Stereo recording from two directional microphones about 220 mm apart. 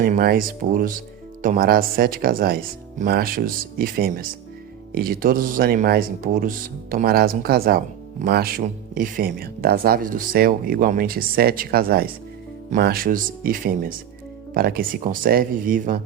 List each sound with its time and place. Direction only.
0.0 s speech: 40° right (ahead or behind)